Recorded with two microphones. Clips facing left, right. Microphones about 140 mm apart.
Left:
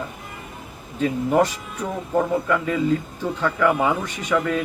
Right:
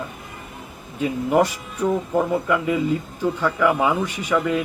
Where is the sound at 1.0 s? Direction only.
10° right (ahead or behind).